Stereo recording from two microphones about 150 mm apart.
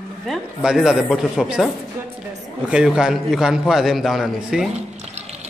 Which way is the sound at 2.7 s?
5° right (ahead or behind).